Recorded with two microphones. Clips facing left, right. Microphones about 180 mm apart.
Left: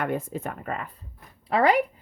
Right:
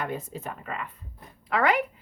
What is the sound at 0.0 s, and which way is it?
Speech, 55° left (ahead or behind).